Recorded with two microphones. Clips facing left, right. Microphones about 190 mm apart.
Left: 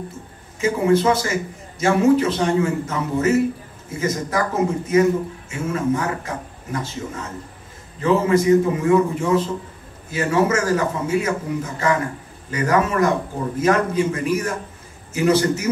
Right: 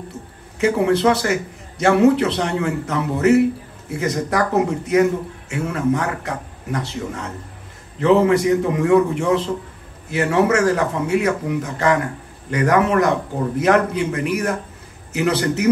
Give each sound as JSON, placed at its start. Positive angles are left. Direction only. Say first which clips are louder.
{"t": 0.6, "sound": "a man's voice", "louder": "right 1 dB", "side_deg": -65}
{"t": 8.0, "sound": "a man's voice", "louder": "right 3 dB", "side_deg": -65}